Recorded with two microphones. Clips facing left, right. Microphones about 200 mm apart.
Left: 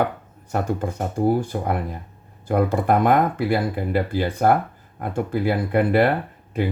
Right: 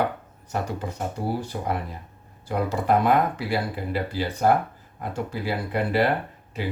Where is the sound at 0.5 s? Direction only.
50° left (ahead or behind).